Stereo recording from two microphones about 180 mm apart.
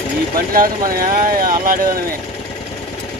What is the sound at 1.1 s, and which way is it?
Speech, 50° right (ahead or behind).